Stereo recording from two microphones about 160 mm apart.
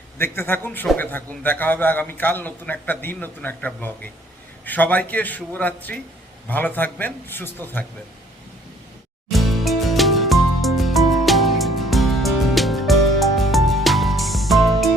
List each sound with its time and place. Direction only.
0.2 s a man's voice: 15° left (ahead or behind)
9.3 s music: centre (ahead or behind)